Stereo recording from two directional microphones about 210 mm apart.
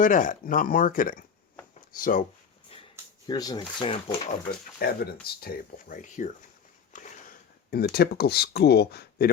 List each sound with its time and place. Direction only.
0.0 s speech: 40° left (ahead or behind)
3.2 s speech: 20° left (ahead or behind)
4.8 s speech: 45° left (ahead or behind)